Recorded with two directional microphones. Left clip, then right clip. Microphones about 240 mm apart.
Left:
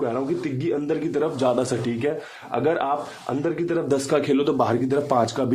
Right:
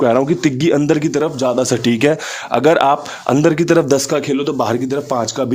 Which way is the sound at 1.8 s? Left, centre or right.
Right.